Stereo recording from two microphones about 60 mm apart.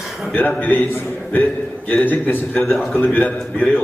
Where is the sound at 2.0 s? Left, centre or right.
Left.